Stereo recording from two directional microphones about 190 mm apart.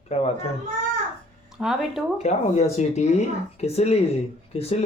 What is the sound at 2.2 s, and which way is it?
Speech, 35° left (ahead or behind).